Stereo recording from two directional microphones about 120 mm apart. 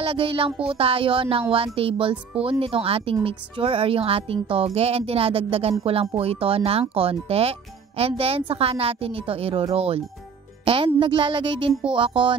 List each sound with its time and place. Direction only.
0.0 s speech: 50° right (ahead or behind)